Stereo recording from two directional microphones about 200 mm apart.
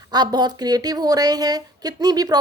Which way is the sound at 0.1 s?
20° right (ahead or behind).